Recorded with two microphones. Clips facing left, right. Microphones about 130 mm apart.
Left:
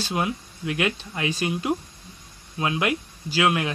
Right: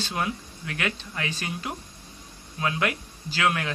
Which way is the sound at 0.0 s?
15° left (ahead or behind).